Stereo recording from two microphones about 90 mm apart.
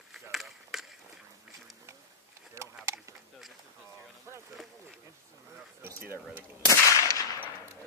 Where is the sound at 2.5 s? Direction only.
30° right (ahead or behind).